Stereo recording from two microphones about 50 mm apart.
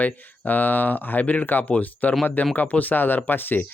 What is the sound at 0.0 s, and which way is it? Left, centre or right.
A man's voice, left.